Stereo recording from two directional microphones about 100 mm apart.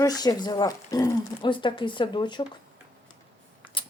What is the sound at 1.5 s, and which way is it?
Speech, 55° left (ahead or behind).